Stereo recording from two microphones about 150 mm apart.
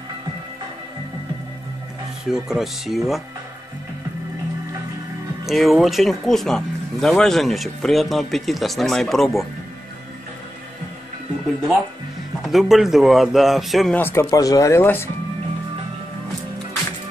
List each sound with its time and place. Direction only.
2.2 s speech: centre (ahead or behind)
5.4 s speech: centre (ahead or behind)
12.4 s speech: centre (ahead or behind)
13.9 s speech: 15° left (ahead or behind)